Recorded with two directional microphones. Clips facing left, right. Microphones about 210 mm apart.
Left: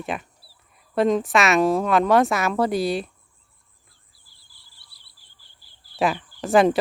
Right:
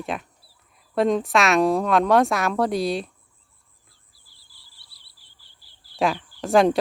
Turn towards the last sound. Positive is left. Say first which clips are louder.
# even
turn(degrees=0)  # may be behind; listen again after turning